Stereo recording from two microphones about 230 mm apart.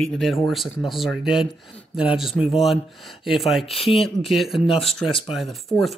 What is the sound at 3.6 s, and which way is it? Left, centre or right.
Speech, left.